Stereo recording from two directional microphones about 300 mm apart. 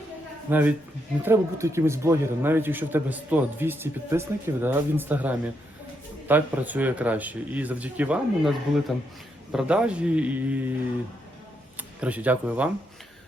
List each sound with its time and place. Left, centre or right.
0.5 s speech: centre
11.8 s speech: centre